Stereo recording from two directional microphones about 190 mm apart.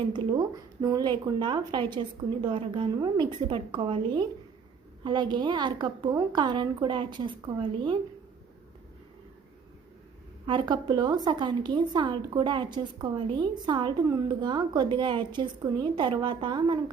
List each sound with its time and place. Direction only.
0.0 s a woman's voice: 25° right (ahead or behind)
10.4 s a woman's voice: 25° right (ahead or behind)